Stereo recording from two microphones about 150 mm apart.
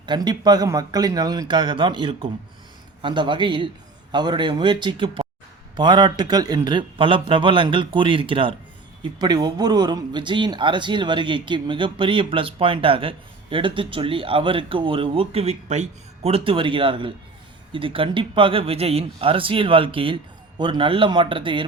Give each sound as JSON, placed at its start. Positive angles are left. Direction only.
{"t": 0.0, "sound": "speech", "side_deg": -30}